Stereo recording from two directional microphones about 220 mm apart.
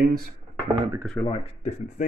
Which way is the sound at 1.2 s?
25° left (ahead or behind).